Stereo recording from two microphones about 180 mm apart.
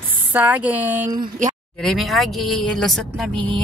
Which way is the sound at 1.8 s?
Centre (ahead or behind).